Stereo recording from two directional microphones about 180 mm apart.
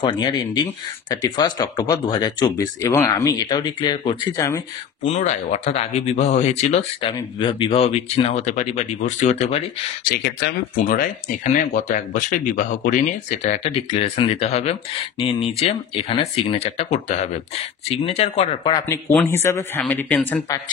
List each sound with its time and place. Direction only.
0.0 s speech: 25° left (ahead or behind)
4.4 s speech: 15° left (ahead or behind)
5.0 s speech: 40° left (ahead or behind)
10.0 s speech: 60° left (ahead or behind); by 18.7 s 35° left (ahead or behind)
18.7 s speech: 20° left (ahead or behind)